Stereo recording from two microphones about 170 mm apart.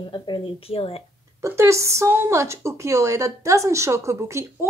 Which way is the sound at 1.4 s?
15° right (ahead or behind).